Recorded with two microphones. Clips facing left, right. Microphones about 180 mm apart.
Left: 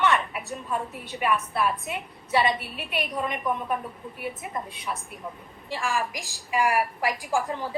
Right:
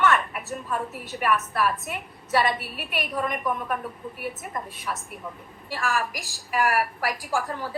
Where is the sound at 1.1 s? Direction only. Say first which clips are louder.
Left 1 dB; 10° left (ahead or behind).